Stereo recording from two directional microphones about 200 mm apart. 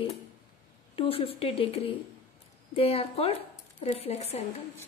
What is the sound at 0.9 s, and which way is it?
A woman's voice, 30° left (ahead or behind).